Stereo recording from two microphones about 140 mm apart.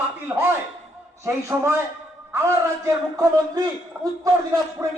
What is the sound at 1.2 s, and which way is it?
A man's voice, 20° right (ahead or behind).